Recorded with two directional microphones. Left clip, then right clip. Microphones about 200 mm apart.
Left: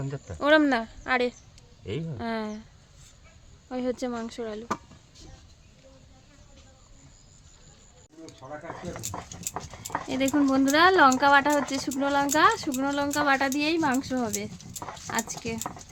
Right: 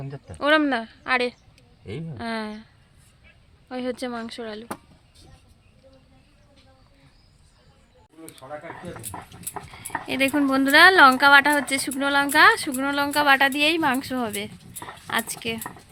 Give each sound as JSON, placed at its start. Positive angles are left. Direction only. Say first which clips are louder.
{"t": 0.3, "sound": "a woman's voice", "louder": "right 1 dB", "side_deg": 0}
{"t": 3.7, "sound": "a woman's voice", "louder": "right 1 dB", "side_deg": 0}
{"t": 9.1, "sound": "speech", "louder": "even", "side_deg": 30}
{"t": 10.1, "sound": "a woman's voice", "louder": "right 3 dB", "side_deg": -5}